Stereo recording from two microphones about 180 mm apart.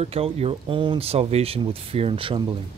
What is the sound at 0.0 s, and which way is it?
Speech, 35° right (ahead or behind).